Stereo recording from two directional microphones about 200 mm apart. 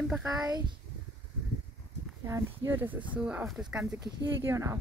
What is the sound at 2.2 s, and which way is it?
Speech, 15° right (ahead or behind).